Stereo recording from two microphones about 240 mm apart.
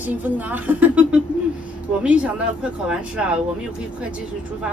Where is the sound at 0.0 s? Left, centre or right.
Centre.